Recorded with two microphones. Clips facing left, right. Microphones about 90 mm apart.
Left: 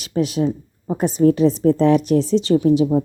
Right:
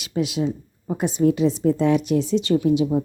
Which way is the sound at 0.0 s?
40° left (ahead or behind).